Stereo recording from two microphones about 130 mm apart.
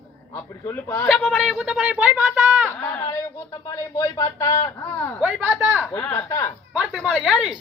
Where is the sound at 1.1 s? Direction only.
5° left (ahead or behind).